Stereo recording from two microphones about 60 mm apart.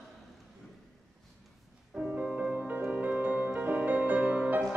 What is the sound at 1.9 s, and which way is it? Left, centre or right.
Music, right.